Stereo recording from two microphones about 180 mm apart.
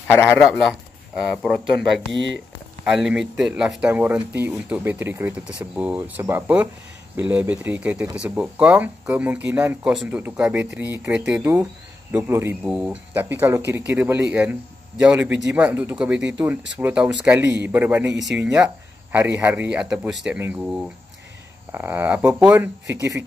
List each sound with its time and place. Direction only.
0.4 s speech: centre (ahead or behind)
2.1 s speech: 90° right
2.8 s a man's voice: 5° right (ahead or behind)